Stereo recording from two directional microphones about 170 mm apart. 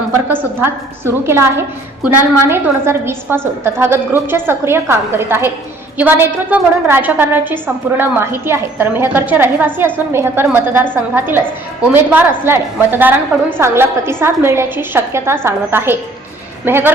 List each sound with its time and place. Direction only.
0.3 s a woman's voice: 10° right (ahead or behind)